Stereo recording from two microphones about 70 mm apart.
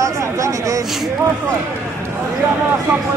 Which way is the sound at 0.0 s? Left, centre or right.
Right.